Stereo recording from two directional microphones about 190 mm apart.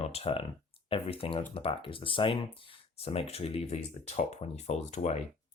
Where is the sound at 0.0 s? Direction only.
35° left (ahead or behind).